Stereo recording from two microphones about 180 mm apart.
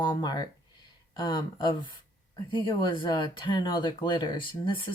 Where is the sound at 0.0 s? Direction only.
25° left (ahead or behind).